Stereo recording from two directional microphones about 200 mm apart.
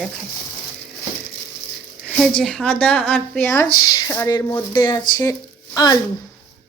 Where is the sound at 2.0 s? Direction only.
Centre (ahead or behind).